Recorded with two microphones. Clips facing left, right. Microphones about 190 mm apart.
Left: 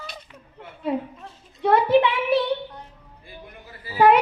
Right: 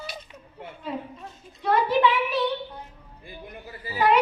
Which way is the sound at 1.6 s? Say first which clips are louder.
Left 5 dB; 60° left (ahead or behind).